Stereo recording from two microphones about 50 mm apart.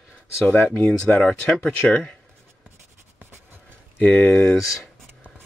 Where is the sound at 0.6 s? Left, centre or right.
Left.